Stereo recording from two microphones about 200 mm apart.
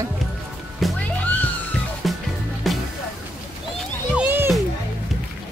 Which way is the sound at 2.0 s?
Centre (ahead or behind).